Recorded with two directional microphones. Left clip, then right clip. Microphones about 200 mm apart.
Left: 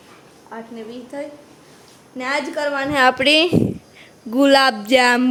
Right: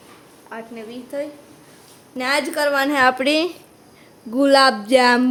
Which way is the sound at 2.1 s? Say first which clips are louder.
Right 2 dB; 15° right (ahead or behind).